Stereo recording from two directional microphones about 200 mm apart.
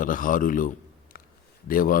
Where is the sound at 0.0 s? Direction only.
40° left (ahead or behind).